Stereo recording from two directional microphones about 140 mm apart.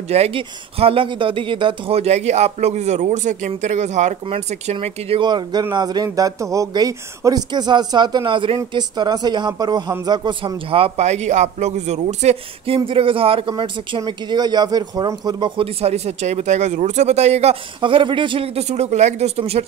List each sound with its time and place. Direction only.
0.1 s speech: 45° right (ahead or behind)
4.7 s speech: 40° right (ahead or behind)
17.7 s speech: 35° right (ahead or behind)